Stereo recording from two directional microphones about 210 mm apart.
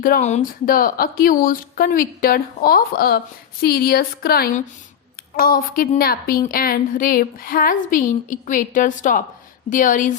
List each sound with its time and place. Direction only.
0.0 s a woman's voice: 35° left (ahead or behind)